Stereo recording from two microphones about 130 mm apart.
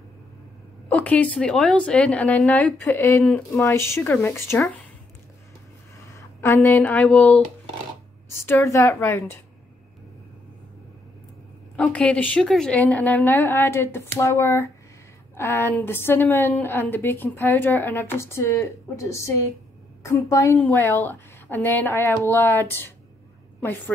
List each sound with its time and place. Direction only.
0.8 s a woman's voice: 10° left (ahead or behind)
6.4 s a woman's voice: 20° left (ahead or behind)
8.5 s a woman's voice: 25° left (ahead or behind)
11.7 s a woman's voice: 10° left (ahead or behind)